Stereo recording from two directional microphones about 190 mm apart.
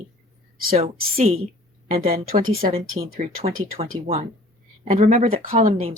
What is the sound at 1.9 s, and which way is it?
Speech, 50° right (ahead or behind).